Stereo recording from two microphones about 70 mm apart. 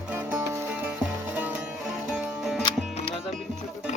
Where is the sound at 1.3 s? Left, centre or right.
Right.